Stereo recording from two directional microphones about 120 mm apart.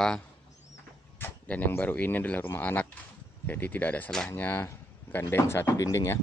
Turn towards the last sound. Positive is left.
turn(degrees=25)  # may be behind; listen again after turning